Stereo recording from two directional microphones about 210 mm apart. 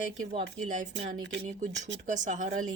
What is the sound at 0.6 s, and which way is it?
Speech, 35° right (ahead or behind).